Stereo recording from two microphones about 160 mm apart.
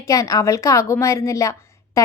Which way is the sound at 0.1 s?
20° left (ahead or behind).